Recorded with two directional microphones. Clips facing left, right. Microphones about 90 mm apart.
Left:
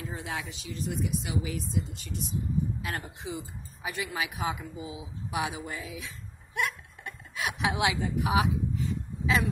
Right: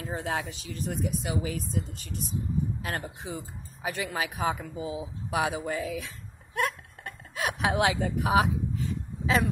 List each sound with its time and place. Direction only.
0.0 s speech: 45° right (ahead or behind)